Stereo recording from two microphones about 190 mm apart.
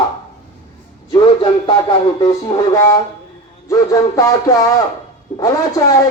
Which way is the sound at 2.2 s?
20° left (ahead or behind).